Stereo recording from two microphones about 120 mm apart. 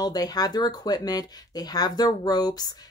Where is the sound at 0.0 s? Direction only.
30° left (ahead or behind).